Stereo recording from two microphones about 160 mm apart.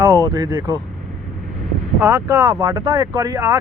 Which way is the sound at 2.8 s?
30° right (ahead or behind).